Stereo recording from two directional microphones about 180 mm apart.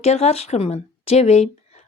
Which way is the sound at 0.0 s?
35° left (ahead or behind).